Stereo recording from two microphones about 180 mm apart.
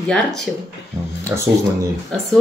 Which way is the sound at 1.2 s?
15° right (ahead or behind).